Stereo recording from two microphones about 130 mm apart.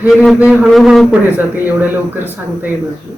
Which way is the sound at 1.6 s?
15° right (ahead or behind).